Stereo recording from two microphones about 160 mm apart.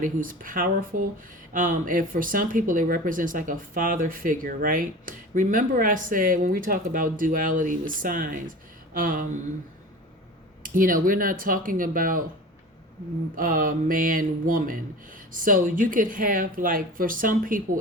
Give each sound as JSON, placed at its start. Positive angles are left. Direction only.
{"t": 0.0, "sound": "speech", "side_deg": -55}
{"t": 10.6, "sound": "speech", "side_deg": -60}
{"t": 13.3, "sound": "speech", "side_deg": -55}